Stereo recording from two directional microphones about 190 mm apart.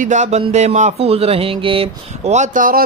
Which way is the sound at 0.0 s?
40° right (ahead or behind).